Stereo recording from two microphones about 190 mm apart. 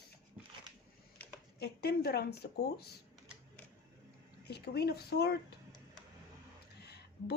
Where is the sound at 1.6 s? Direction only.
55° left (ahead or behind).